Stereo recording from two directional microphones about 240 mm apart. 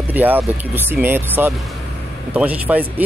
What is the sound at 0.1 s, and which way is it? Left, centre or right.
Speech, centre.